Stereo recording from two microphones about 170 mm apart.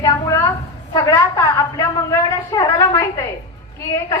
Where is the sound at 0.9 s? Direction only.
20° left (ahead or behind).